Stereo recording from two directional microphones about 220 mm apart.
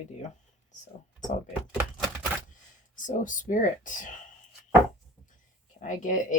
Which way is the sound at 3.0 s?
35° left (ahead or behind).